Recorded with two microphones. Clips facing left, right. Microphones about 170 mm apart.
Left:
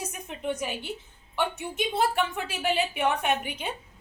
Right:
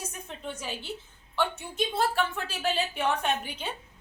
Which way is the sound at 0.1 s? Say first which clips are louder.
Left 6 dB; 15° left (ahead or behind).